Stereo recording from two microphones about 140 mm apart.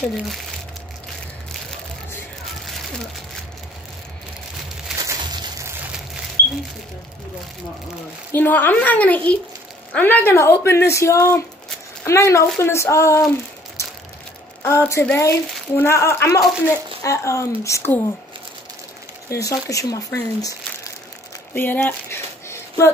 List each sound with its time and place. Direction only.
5.0 s a sound: 20° right (ahead or behind)
8.3 s a woman's voice: 15° left (ahead or behind)
13.8 s crushing: 20° left (ahead or behind)
14.6 s speech: 20° left (ahead or behind)
19.2 s speech: 25° left (ahead or behind)
21.5 s a sound: 15° left (ahead or behind)